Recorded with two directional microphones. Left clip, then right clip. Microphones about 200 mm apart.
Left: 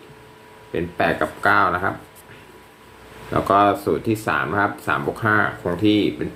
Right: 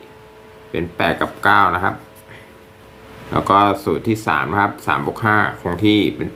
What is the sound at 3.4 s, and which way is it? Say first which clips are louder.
Speech: right 2 dB; 20° right (ahead or behind).